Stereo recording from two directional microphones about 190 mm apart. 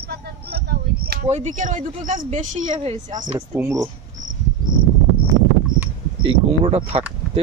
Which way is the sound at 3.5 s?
15° right (ahead or behind).